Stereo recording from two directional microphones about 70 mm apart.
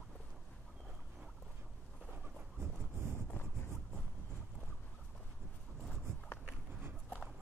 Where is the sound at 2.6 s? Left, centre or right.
Right.